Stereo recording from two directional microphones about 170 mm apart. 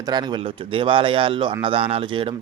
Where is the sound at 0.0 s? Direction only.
25° right (ahead or behind).